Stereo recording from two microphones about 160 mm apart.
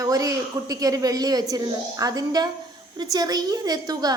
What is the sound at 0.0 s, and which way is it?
A woman's voice, 20° right (ahead or behind).